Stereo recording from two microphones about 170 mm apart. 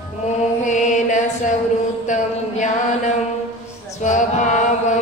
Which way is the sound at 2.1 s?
45° left (ahead or behind).